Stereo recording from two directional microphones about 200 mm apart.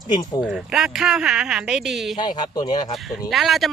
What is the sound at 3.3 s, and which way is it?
Speech, centre (ahead or behind).